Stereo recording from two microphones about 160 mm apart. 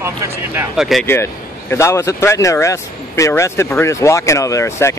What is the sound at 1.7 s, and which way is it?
Speech, 15° left (ahead or behind).